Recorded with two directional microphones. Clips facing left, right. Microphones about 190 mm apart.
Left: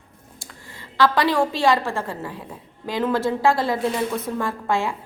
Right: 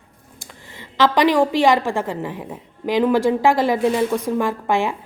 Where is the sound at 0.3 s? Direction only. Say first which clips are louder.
Right 3 dB; 20° right (ahead or behind).